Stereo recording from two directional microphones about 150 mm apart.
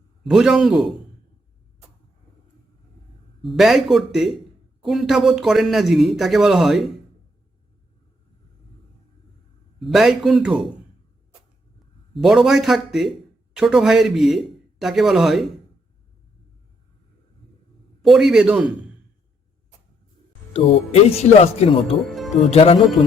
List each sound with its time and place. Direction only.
0.3 s a man's voice: 5° right (ahead or behind)
3.4 s a man's voice: centre (ahead or behind)
9.8 s a man's voice: centre (ahead or behind)
12.1 s a man's voice: centre (ahead or behind)
18.0 s a man's voice: centre (ahead or behind)
20.5 s speech: 45° left (ahead or behind)
22.1 s speech: centre (ahead or behind)
22.5 s speech: 40° left (ahead or behind)